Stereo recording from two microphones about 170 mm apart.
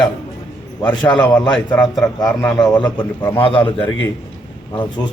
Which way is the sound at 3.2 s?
25° left (ahead or behind).